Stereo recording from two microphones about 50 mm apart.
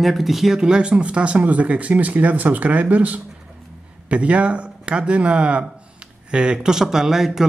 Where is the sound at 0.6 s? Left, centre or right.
Centre.